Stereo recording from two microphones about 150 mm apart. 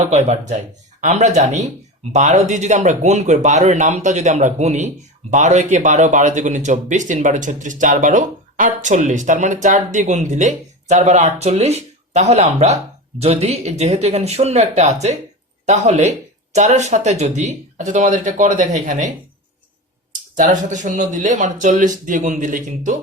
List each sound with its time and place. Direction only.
0.1 s speech: 50° right (ahead or behind)
20.3 s speech: 55° right (ahead or behind)